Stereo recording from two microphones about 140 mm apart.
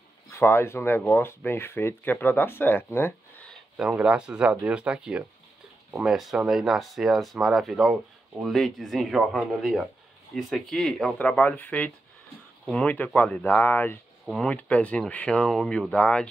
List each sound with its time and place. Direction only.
0.3 s speech: 15° left (ahead or behind)
3.7 s speech: 5° right (ahead or behind)